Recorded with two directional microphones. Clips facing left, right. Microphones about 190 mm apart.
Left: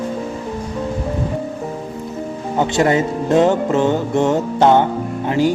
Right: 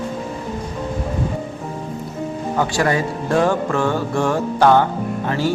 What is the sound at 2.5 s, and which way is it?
A man's voice, 20° left (ahead or behind).